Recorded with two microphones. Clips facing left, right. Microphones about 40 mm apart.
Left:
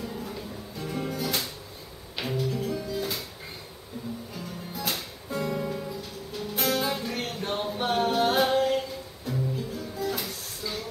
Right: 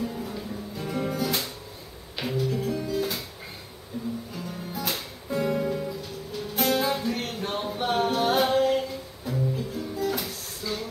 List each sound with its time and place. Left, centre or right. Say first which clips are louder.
0.0 s music: right 3 dB; centre
3.9 s music: right 5 dB; centre
4.7 s music: even; centre
5.4 s music: right 4 dB; centre
5.7 s music: right 3 dB; centre